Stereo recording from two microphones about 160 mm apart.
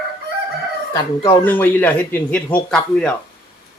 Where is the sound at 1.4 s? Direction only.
10° left (ahead or behind).